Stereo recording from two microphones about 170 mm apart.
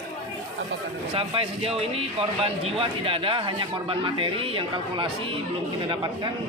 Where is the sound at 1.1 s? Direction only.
30° right (ahead or behind).